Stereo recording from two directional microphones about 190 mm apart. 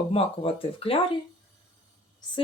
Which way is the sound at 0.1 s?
30° left (ahead or behind).